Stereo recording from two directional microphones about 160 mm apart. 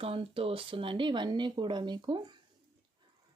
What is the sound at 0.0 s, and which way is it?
Speech, 35° right (ahead or behind).